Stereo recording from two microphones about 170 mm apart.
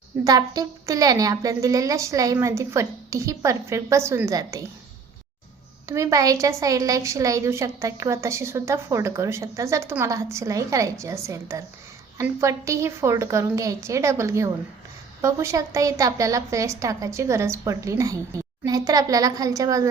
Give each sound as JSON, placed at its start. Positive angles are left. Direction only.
{"t": 0.3, "sound": "a woman's voice", "side_deg": -20}
{"t": 5.9, "sound": "a woman's voice", "side_deg": -20}